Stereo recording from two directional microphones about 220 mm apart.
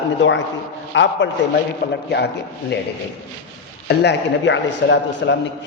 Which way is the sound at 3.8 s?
50° left (ahead or behind).